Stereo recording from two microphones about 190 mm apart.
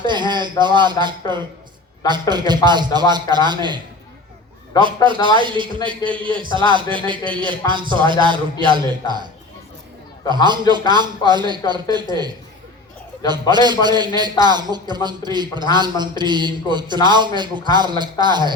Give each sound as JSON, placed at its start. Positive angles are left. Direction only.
{"t": 0.0, "sound": "a man's voice", "side_deg": -25}
{"t": 2.0, "sound": "a man's voice", "side_deg": -25}
{"t": 4.7, "sound": "a man's voice", "side_deg": 20}
{"t": 5.4, "sound": "a man's voice", "side_deg": -25}
{"t": 10.2, "sound": "a man's voice", "side_deg": -25}
{"t": 13.5, "sound": "a man's voice", "side_deg": -20}